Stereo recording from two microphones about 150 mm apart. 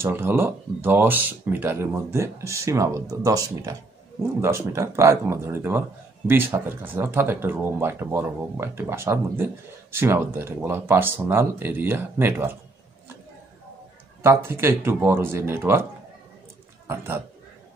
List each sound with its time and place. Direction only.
0.0 s speech: 15° right (ahead or behind)
14.2 s a man's voice: 15° right (ahead or behind)